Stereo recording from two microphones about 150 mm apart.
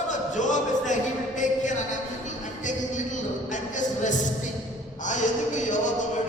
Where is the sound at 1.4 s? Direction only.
55° left (ahead or behind).